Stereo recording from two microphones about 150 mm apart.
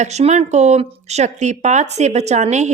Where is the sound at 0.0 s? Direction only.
50° right (ahead or behind).